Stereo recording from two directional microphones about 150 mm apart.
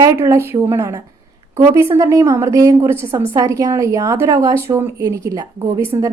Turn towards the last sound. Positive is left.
turn(degrees=-20)  # may be behind; listen again after turning